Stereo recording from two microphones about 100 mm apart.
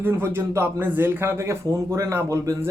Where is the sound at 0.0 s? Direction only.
25° right (ahead or behind).